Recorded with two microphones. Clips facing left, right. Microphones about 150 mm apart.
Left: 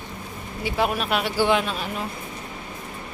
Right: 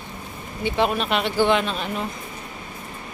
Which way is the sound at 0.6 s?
5° left (ahead or behind).